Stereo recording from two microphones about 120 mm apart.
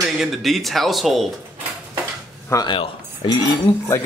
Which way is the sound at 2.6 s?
45° left (ahead or behind).